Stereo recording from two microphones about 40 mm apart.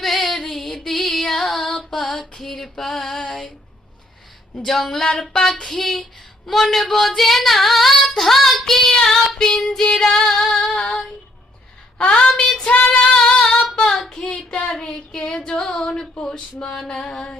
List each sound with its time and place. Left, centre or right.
0.0 s female singing: centre
4.6 s speech: centre
5.6 s female singing: centre
8.2 s child singing: centre
9.3 s speech: centre
10.5 s female singing: centre
11.9 s female singing: left
12.6 s female singing: left
13.0 s singing: centre
13.9 s child singing: centre
14.7 s speech: centre
15.3 s female singing: left